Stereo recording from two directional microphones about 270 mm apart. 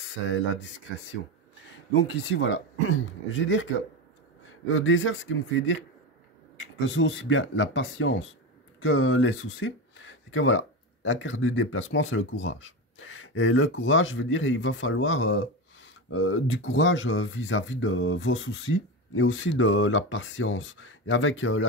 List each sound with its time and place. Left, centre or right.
2.0 s speech: left
4.6 s speech: left